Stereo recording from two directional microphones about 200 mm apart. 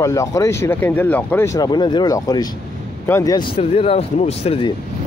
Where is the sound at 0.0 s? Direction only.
15° left (ahead or behind).